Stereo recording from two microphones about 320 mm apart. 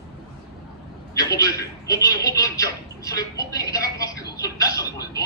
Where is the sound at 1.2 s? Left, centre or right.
Centre.